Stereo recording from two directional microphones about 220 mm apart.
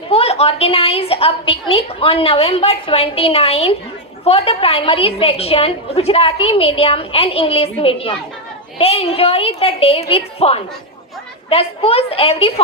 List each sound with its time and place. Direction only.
0.1 s a woman's voice: 25° left (ahead or behind)